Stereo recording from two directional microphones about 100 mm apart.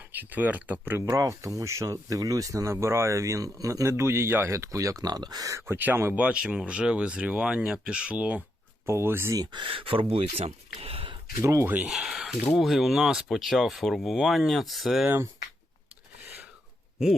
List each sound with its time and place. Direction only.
0.1 s speech: 15° right (ahead or behind)
1.0 s speech: 30° right (ahead or behind); by 8.4 s 15° right (ahead or behind)
8.9 s speech: 25° right (ahead or behind)
9.5 s speech: 55° right (ahead or behind)
11.4 s speech: 30° right (ahead or behind)
11.9 s speech: 5° right (ahead or behind)